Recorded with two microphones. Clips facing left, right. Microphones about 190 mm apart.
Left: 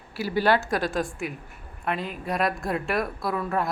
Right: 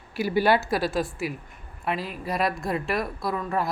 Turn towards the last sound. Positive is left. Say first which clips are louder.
# even
turn(degrees=0)  # may be behind; listen again after turning